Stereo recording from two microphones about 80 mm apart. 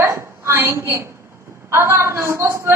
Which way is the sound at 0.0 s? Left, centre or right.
Right.